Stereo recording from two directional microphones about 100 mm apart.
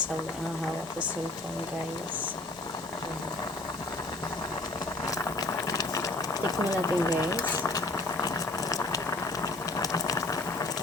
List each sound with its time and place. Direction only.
5.1 s boiling: 35° left (ahead or behind)